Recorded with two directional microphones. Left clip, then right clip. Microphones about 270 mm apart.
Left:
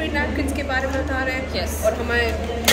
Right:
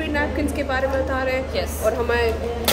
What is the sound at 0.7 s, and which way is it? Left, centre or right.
Speech, right.